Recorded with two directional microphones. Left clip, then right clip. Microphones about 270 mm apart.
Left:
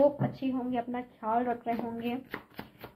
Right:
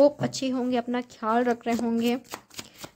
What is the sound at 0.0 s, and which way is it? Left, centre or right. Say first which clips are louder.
Speech: right 5 dB; right.